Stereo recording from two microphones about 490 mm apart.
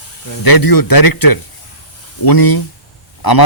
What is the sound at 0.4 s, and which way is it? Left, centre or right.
A man's voice, left.